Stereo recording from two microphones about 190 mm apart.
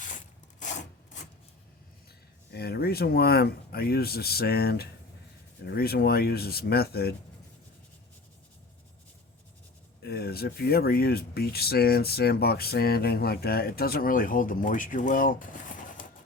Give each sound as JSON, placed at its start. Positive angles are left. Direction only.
{"t": 2.5, "sound": "speech", "side_deg": 55}
{"t": 10.0, "sound": "speech", "side_deg": 55}